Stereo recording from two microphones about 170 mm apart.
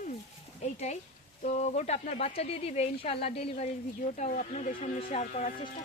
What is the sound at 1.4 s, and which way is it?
Speech, 45° left (ahead or behind).